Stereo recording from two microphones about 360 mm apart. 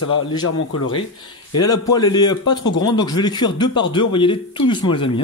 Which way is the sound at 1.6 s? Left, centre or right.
Centre.